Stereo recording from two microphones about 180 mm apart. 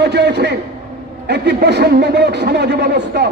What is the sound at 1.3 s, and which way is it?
A man's voice, 65° right (ahead or behind).